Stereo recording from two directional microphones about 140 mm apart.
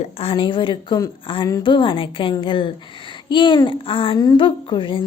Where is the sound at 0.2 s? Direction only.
40° left (ahead or behind).